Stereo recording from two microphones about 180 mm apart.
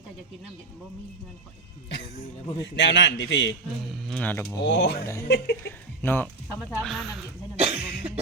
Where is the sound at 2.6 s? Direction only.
90° left.